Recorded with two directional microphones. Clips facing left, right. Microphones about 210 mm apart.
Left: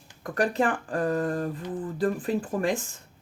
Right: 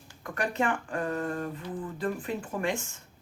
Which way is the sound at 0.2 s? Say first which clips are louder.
Left 5 dB; 35° left (ahead or behind).